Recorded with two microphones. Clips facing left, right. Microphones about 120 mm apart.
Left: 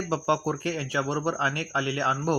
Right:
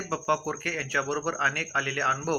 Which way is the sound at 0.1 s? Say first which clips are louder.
Left 2 dB; 20° left (ahead or behind).